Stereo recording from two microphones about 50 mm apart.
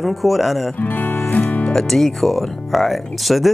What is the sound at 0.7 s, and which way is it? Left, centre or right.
Speech, left.